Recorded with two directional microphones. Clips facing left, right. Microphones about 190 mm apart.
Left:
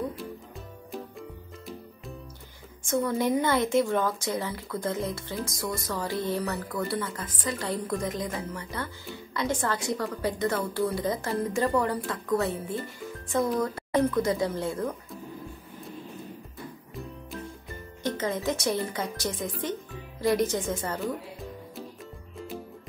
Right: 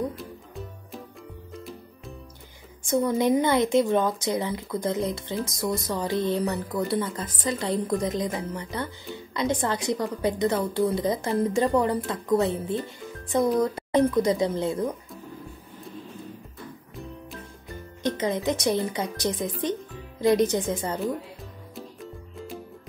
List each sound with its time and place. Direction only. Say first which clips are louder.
0.2 s music: right 1 dB; centre (ahead or behind)
2.9 s speech: right 4 dB; 15° right (ahead or behind)
18.0 s speech: right 3 dB; 15° right (ahead or behind)
21.7 s music: right 2 dB; centre (ahead or behind)